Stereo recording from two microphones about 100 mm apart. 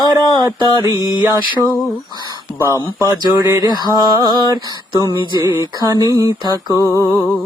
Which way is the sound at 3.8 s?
45° right (ahead or behind).